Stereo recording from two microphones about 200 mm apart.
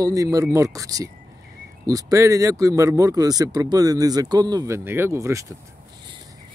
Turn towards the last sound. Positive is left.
turn(degrees=-15)  # may be behind; listen again after turning